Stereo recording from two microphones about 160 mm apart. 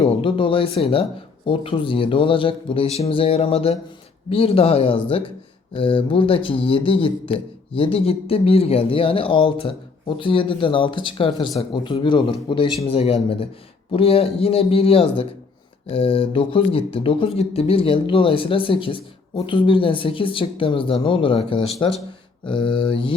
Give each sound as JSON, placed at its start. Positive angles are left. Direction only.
{"t": 0.0, "sound": "speech", "side_deg": 35}